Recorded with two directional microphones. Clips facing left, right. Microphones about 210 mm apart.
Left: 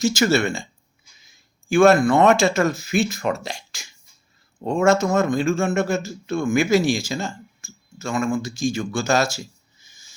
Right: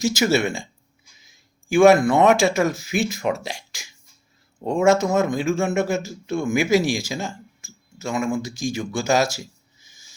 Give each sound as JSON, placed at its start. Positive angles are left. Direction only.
{"t": 0.0, "sound": "speech", "side_deg": -15}